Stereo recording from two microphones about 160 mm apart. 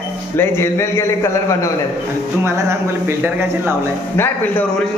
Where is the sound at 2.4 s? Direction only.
15° right (ahead or behind).